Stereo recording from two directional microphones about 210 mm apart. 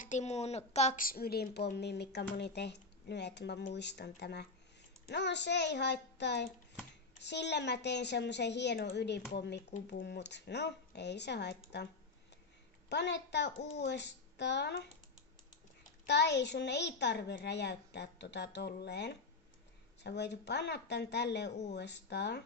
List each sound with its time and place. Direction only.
0.0 s a woman's voice: 35° left (ahead or behind); by 11.9 s 55° left (ahead or behind)
12.9 s a woman's voice: 55° left (ahead or behind)
16.1 s a woman's voice: 55° left (ahead or behind)